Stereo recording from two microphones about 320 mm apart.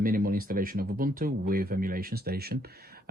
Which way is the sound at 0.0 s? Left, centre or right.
Right.